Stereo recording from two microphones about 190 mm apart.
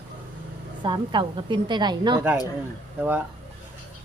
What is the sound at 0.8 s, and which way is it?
A woman's voice, 25° right (ahead or behind).